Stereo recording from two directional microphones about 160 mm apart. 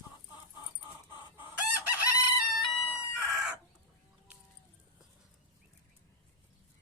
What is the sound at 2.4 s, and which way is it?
Fowl, 5° right (ahead or behind).